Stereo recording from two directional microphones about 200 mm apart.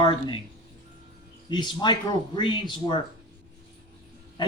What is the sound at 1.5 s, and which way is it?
Speech, 20° left (ahead or behind).